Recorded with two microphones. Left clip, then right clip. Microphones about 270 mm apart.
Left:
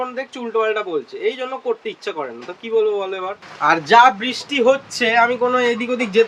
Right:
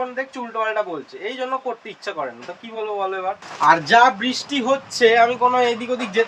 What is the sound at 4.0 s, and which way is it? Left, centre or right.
Speech, centre.